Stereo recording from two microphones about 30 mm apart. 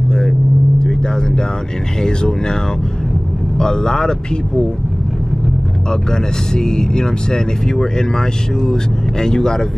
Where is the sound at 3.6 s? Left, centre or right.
Left.